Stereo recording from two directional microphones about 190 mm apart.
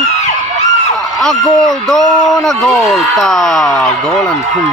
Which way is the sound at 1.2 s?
Centre (ahead or behind).